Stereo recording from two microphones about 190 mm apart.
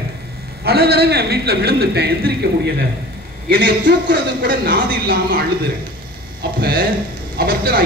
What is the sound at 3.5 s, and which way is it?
A man's voice, 55° right (ahead or behind).